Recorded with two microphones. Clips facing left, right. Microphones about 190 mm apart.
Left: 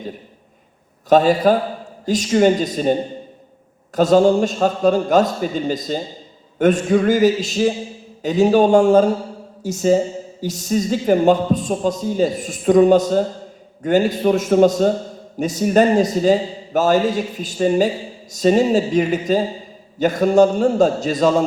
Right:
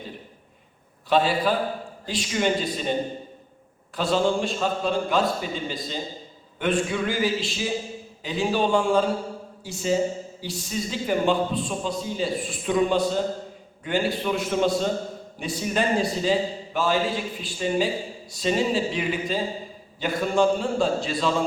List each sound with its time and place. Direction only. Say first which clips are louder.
1.1 s a man's voice: left 8 dB; 45° left (ahead or behind)
3.9 s a man's voice: left 10 dB; 45° left (ahead or behind)